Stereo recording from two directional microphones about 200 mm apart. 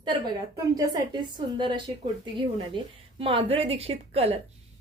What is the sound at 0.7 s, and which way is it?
A woman's voice, 20° right (ahead or behind).